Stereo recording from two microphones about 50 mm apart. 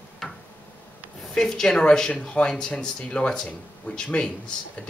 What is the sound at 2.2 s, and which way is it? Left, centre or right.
Speech, left.